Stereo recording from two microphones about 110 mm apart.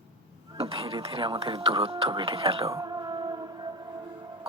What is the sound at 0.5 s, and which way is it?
Speech, 60° right (ahead or behind).